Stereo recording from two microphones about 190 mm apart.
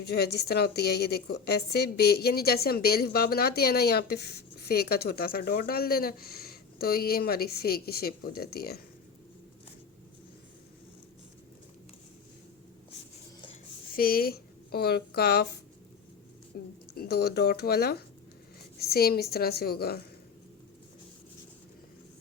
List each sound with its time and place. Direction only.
0.0 s a woman's voice: 60° left (ahead or behind)
13.9 s a woman's voice: 50° left (ahead or behind)
16.5 s a woman's voice: 50° left (ahead or behind)